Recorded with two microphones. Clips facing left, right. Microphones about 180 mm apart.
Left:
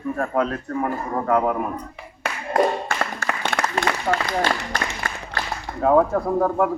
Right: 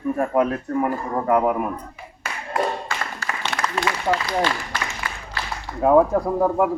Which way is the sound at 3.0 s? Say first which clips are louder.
Left 4 dB; 55° left (ahead or behind).